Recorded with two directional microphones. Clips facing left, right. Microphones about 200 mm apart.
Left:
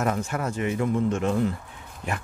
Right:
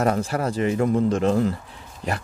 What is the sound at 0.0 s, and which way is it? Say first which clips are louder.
Speech: right 4 dB; 35° right (ahead or behind).